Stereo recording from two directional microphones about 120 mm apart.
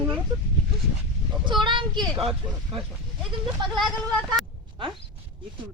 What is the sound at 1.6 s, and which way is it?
Speech, 40° right (ahead or behind).